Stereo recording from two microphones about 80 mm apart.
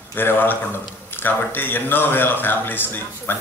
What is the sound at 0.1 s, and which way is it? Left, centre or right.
A man's voice, left.